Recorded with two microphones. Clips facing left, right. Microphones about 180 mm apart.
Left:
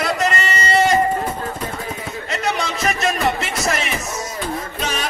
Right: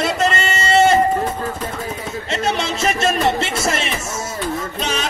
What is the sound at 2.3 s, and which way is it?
A man's voice, 25° right (ahead or behind).